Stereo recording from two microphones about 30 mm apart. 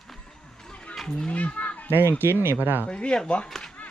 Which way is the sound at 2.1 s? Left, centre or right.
Right.